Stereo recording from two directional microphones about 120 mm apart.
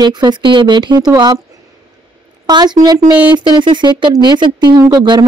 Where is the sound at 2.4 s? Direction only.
35° right (ahead or behind).